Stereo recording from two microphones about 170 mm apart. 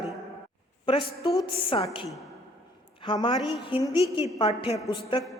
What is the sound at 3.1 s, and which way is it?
A woman's voice, 25° left (ahead or behind).